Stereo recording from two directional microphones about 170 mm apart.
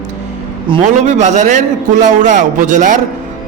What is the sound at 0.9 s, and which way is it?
A man's voice, 45° right (ahead or behind).